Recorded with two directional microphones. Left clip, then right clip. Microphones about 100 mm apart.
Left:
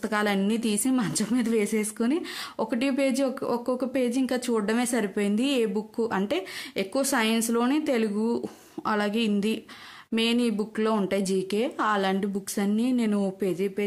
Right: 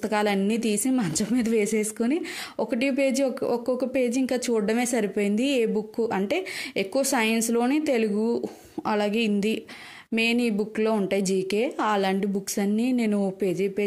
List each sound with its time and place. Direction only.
0.0 s speech: 35° right (ahead or behind)